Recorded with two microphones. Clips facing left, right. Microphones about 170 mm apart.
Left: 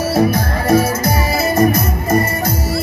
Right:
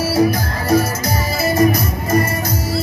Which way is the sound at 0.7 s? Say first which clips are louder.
Left 2 dB; 55° left (ahead or behind).